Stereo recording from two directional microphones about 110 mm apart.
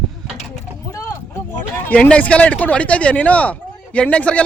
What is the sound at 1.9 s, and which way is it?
Speech, 10° left (ahead or behind).